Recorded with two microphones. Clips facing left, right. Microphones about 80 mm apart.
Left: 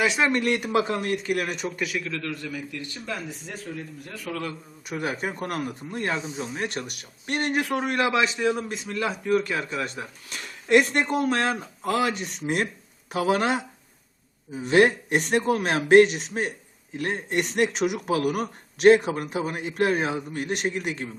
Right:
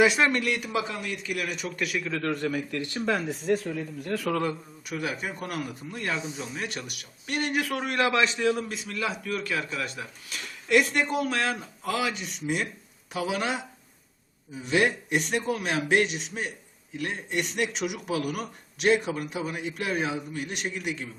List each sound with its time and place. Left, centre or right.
0.0 s speech: centre
0.3 s a man's voice: left
1.8 s speech: centre
2.2 s a man's voice: right
2.7 s speech: right
4.9 s speech: left
7.6 s a man's voice: left